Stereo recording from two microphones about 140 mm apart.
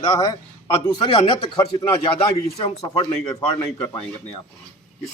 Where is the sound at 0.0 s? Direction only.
25° left (ahead or behind).